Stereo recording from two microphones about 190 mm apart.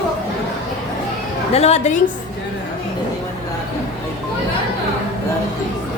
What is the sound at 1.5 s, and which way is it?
Speech, 35° left (ahead or behind).